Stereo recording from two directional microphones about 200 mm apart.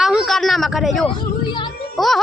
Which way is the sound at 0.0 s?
Centre (ahead or behind).